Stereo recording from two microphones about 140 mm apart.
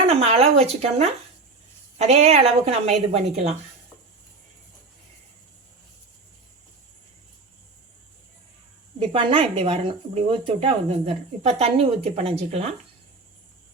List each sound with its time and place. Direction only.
0.0 s speech: 45° right (ahead or behind)
9.0 s speech: 40° right (ahead or behind)